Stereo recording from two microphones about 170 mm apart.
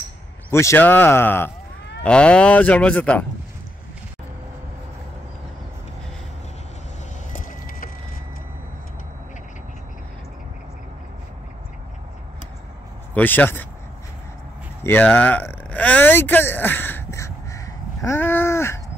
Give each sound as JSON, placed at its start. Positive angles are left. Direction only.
{"t": 0.5, "sound": "speech", "side_deg": 15}
{"t": 7.3, "sound": "vehicle", "side_deg": 55}
{"t": 13.1, "sound": "speech", "side_deg": 10}
{"t": 14.8, "sound": "a sound", "side_deg": 10}